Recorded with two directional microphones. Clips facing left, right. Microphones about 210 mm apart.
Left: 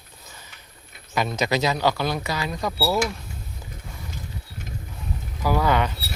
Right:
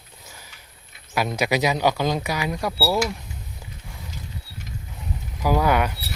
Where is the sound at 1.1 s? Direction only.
10° right (ahead or behind).